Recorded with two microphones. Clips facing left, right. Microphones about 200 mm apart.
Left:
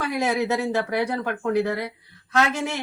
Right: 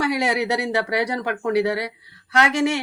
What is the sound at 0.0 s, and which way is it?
A woman's voice, 75° right (ahead or behind).